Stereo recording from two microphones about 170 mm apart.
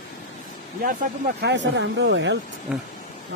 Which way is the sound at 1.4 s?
90° right.